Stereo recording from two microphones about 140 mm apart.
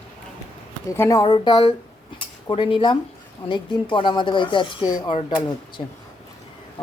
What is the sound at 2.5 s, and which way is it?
Speech, 40° left (ahead or behind).